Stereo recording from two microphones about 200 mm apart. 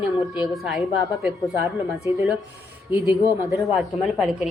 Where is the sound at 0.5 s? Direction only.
Centre (ahead or behind).